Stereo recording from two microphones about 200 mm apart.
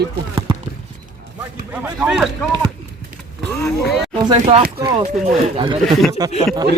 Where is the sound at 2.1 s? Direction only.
Centre (ahead or behind).